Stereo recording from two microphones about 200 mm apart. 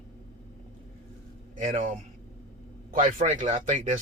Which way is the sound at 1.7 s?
40° right (ahead or behind).